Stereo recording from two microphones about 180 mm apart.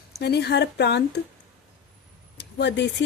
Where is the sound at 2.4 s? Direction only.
70° left (ahead or behind).